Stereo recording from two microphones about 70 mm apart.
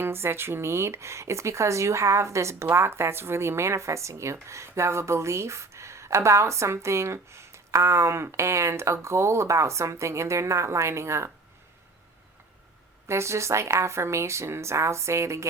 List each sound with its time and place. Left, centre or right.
0.0 s speech: right
13.1 s speech: right